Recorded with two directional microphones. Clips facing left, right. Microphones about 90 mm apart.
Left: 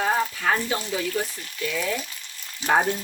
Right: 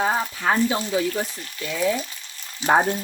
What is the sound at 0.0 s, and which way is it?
Speech, 20° right (ahead or behind).